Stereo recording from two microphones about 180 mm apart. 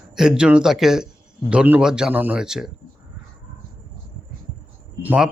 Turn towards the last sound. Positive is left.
turn(degrees=-10)  # may be behind; listen again after turning